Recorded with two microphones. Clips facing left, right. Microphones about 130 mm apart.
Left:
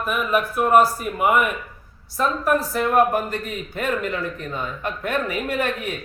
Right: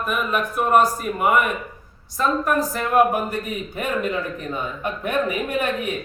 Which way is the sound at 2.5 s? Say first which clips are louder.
Left 1 dB; centre (ahead or behind).